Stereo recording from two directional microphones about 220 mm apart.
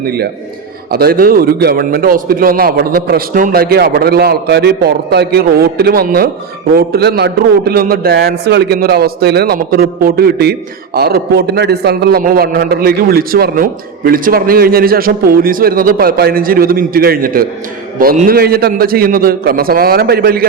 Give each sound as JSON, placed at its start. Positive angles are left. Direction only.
{"t": 0.0, "sound": "a man's voice", "side_deg": -45}